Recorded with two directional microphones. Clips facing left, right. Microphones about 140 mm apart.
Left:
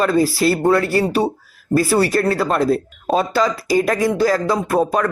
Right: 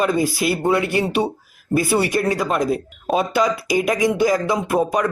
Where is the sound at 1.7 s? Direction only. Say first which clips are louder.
Left 3 dB; 20° right (ahead or behind).